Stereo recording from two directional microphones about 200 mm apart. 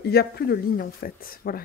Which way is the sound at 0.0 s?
50° left (ahead or behind).